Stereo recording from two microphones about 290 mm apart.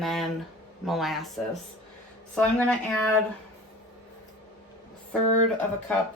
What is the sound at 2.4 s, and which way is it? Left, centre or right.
Speech, centre.